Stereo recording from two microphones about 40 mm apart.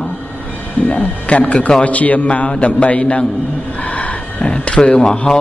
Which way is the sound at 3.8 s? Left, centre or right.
Left.